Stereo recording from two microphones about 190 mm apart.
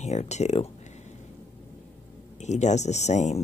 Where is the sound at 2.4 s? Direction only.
40° left (ahead or behind).